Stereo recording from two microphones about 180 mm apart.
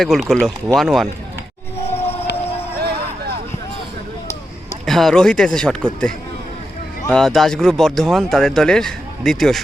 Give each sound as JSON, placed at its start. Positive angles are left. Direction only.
{"t": 0.0, "sound": "speech", "side_deg": 0}
{"t": 1.9, "sound": "a sound", "side_deg": 35}
{"t": 4.9, "sound": "speech", "side_deg": 0}
{"t": 7.1, "sound": "speech", "side_deg": 0}